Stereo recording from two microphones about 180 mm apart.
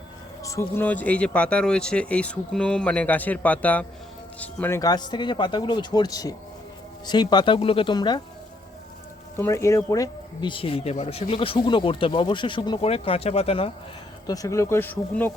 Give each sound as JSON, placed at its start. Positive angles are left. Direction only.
{"t": 0.4, "sound": "speech", "side_deg": 15}
{"t": 4.8, "sound": "speech", "side_deg": 20}
{"t": 9.4, "sound": "speech", "side_deg": 15}
{"t": 14.3, "sound": "speech", "side_deg": 20}